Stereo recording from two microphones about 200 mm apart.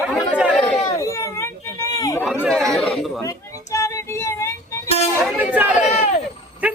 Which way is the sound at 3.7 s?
15° left (ahead or behind).